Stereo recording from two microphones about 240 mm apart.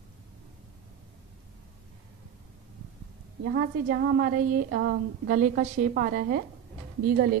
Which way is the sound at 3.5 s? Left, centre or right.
Right.